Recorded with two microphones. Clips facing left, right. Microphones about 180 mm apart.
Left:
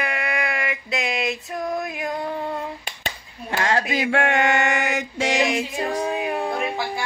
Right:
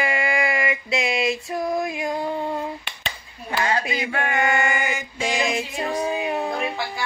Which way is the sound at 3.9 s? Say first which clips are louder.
Left 4 dB; 80° left.